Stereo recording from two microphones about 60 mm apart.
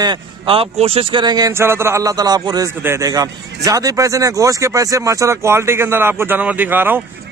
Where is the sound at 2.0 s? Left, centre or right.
Right.